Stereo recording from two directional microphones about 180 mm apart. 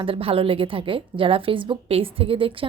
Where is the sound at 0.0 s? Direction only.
30° right (ahead or behind).